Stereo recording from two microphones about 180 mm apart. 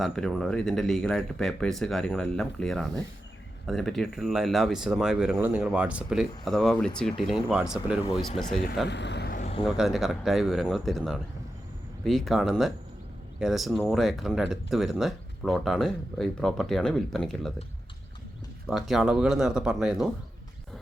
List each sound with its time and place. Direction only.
0.0 s speech: 5° left (ahead or behind)
8.9 s vehicle: 75° left (ahead or behind)
9.4 s a sound: 35° left (ahead or behind)
9.6 s speech: centre (ahead or behind)
18.9 s speech: centre (ahead or behind)